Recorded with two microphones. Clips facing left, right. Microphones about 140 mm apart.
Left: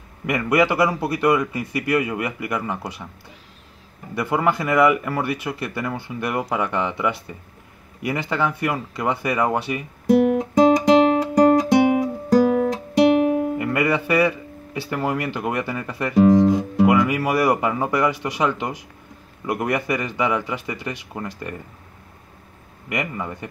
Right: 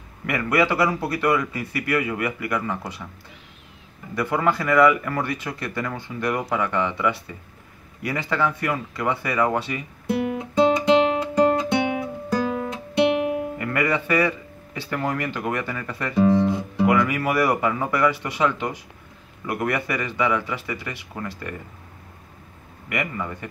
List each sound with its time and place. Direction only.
0.3 s speech: 15° left (ahead or behind)
4.1 s speech: 15° left (ahead or behind)
10.2 s guitar: 40° left (ahead or behind)
13.6 s speech: 10° left (ahead or behind)
16.3 s guitar: 40° left (ahead or behind)
16.8 s speech: 15° left (ahead or behind)
22.8 s speech: 15° left (ahead or behind)